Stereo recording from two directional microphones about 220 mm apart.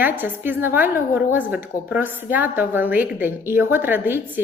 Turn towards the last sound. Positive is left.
turn(degrees=-10)  # may be behind; listen again after turning